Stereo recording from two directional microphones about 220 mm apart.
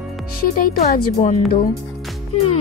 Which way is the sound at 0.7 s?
30° left (ahead or behind).